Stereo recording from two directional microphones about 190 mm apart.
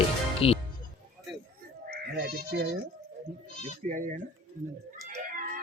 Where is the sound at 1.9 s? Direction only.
60° right (ahead or behind).